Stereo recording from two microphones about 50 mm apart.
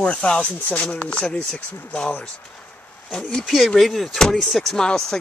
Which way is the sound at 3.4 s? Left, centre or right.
Centre.